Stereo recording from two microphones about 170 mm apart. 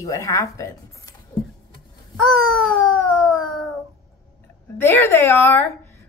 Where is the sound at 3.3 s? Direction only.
Centre (ahead or behind).